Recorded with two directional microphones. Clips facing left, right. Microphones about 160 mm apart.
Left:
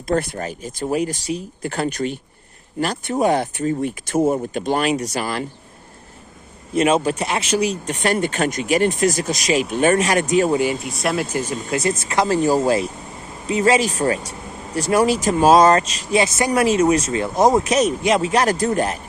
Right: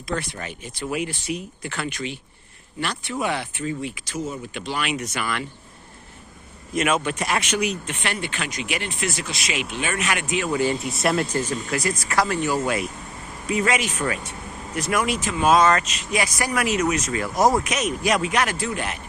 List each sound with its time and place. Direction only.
0.1 s speech: 45° left (ahead or behind)
6.7 s speech: 30° left (ahead or behind)
10.8 s speech: centre (ahead or behind)
11.7 s speech: 25° left (ahead or behind); by 18.9 s 40° left (ahead or behind)